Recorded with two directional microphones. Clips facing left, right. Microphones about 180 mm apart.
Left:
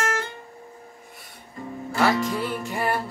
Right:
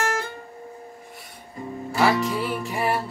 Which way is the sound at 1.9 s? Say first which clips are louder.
Right 1 dB; 5° right (ahead or behind).